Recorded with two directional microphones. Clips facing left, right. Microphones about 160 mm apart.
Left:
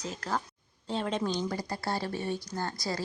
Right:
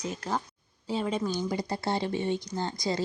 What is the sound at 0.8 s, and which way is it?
Speech, 5° right (ahead or behind).